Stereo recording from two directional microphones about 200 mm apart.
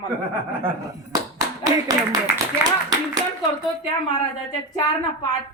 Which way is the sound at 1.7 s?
20° right (ahead or behind).